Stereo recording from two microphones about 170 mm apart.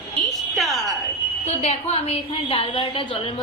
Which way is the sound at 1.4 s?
40° left (ahead or behind).